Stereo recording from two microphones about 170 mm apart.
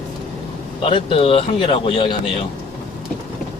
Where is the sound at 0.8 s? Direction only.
30° left (ahead or behind).